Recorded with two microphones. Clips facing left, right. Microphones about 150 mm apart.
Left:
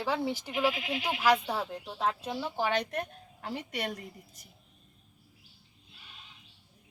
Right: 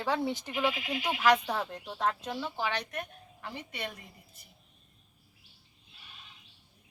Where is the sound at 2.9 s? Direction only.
35° left (ahead or behind).